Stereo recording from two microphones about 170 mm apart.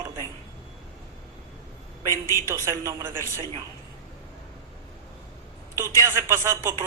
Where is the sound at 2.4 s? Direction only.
15° right (ahead or behind).